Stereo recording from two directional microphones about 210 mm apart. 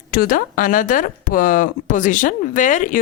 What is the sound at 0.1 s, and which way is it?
Speech, 45° left (ahead or behind).